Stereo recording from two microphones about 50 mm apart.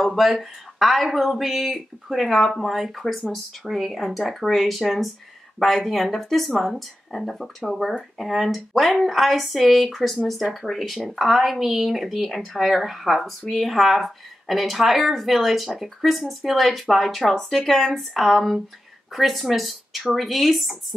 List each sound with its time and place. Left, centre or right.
0.0 s speech: centre